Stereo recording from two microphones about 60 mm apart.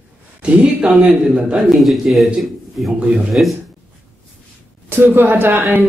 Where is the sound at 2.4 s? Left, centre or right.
Centre.